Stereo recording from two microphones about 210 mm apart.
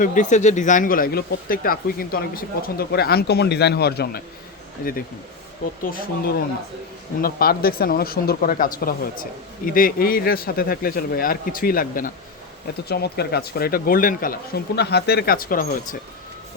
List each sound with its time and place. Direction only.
0.0 s speech: 35° left (ahead or behind)
5.8 s speech: 40° left (ahead or behind)